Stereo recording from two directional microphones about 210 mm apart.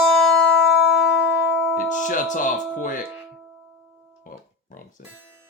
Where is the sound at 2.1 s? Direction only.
40° left (ahead or behind).